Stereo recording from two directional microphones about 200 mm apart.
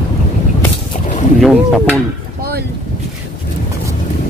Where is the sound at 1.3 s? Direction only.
Centre (ahead or behind).